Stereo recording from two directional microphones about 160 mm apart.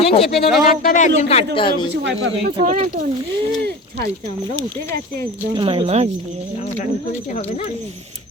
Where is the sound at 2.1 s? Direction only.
90° right.